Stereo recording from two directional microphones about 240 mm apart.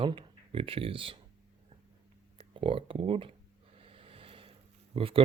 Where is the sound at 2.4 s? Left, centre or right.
Right.